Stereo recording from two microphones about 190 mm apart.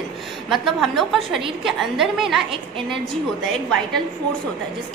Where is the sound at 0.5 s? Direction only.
Centre (ahead or behind).